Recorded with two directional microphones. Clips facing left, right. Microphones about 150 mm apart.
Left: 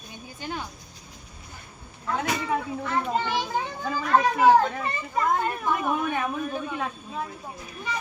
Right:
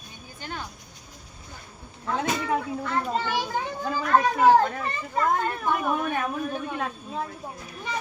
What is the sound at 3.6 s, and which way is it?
Children playing, 10° right (ahead or behind).